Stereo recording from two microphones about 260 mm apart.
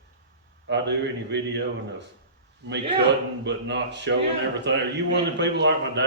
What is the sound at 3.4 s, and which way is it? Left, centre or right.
A man's voice, right.